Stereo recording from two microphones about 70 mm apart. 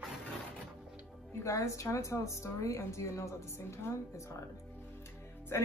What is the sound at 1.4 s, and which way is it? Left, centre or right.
Speech, left.